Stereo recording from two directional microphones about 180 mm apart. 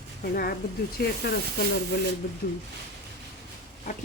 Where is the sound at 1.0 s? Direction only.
60° left (ahead or behind).